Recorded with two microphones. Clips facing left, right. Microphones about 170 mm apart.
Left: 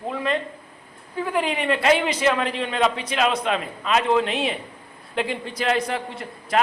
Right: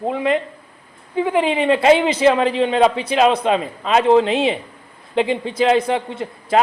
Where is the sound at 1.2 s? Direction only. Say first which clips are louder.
Right 6 dB; 25° right (ahead or behind).